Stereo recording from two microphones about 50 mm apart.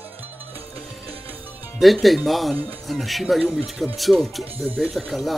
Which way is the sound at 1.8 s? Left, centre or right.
Centre.